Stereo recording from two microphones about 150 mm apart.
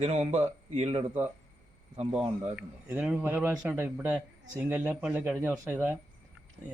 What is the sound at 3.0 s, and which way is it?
Speech, 10° right (ahead or behind).